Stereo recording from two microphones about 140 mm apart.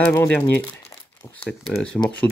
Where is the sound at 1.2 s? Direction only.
15° left (ahead or behind).